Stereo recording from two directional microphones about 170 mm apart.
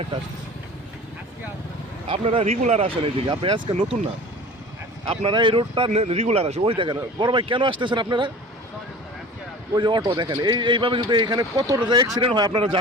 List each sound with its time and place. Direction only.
2.0 s speech: 35° right (ahead or behind)
5.0 s speech: 30° right (ahead or behind)
9.7 s speech: 25° right (ahead or behind)